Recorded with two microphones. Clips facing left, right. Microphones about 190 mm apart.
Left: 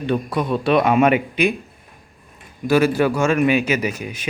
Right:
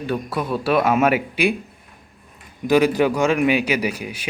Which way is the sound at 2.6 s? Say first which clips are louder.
Even; 15° right (ahead or behind).